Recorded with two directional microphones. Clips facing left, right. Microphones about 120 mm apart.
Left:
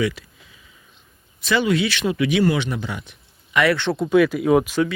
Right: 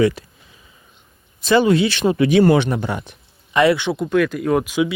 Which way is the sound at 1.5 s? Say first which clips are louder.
Right 5 dB; 35° right (ahead or behind).